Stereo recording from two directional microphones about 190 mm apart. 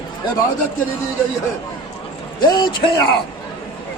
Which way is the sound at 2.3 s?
20° left (ahead or behind).